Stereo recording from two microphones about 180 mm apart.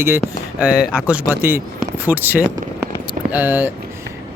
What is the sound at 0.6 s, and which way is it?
Speech, 5° right (ahead or behind).